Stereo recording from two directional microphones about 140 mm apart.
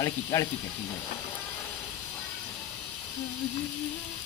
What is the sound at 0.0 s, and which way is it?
Speech, 20° left (ahead or behind).